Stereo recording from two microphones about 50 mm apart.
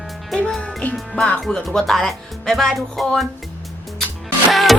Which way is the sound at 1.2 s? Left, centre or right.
Left.